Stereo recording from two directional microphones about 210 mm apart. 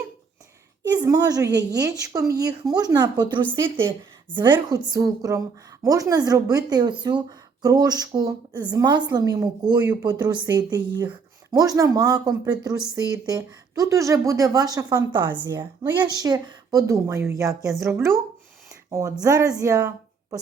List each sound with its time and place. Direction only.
0.8 s a woman's voice: 20° right (ahead or behind)